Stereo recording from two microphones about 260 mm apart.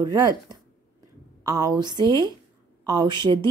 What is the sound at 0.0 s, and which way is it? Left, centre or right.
Speech, centre.